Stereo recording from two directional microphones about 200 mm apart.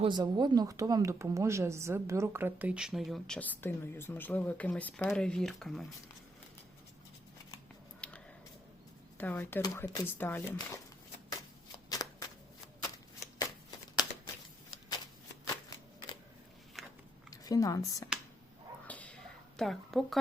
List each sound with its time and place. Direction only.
0.0 s speech: 20° right (ahead or behind); by 5.8 s centre (ahead or behind)
8.0 s a sound: 5° left (ahead or behind)
9.1 s speech: 10° left (ahead or behind)
11.9 s shuffling cards: 20° left (ahead or behind)
17.3 s speech: 15° left (ahead or behind)
18.9 s a sound: 5° left (ahead or behind)
19.5 s a woman's voice: centre (ahead or behind)